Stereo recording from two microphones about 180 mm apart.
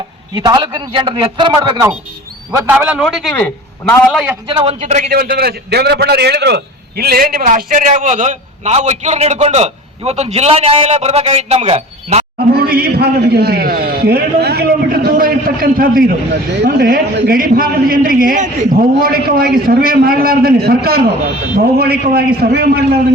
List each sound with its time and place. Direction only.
0.3 s a man's voice: 25° right (ahead or behind)
2.6 s a man's voice: 5° right (ahead or behind)
3.3 s a man's voice: 10° left (ahead or behind)
4.1 s a man's voice: 5° right (ahead or behind)
4.4 s a man's voice: 30° right (ahead or behind)
5.0 s a man's voice: 60° right (ahead or behind); by 12.2 s 35° right (ahead or behind)
12.5 s a man's voice: 55° right (ahead or behind)